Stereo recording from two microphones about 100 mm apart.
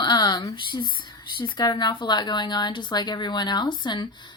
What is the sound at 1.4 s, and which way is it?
Speech, 45° left (ahead or behind).